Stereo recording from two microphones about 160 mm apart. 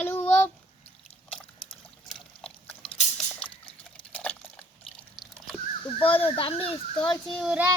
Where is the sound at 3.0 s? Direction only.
45° left (ahead or behind).